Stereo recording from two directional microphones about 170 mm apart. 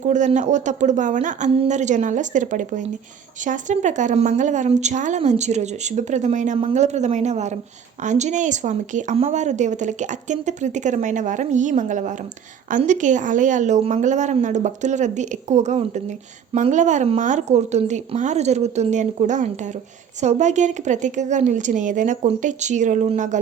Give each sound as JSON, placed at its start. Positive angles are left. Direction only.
{"t": 0.0, "sound": "a woman's voice", "side_deg": -45}